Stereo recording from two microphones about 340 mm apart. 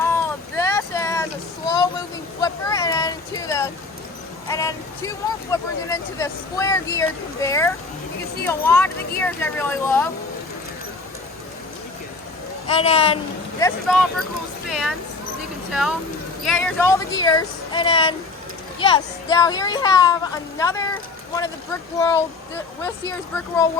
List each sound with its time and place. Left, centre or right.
0.0 s child singing: centre
2.4 s a sound: centre
4.4 s speech: centre
12.6 s speech: centre
13.6 s speech: centre
21.9 s speech: centre